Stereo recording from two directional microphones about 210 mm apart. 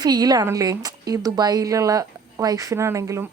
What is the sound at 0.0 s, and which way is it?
A woman's voice, 20° right (ahead or behind).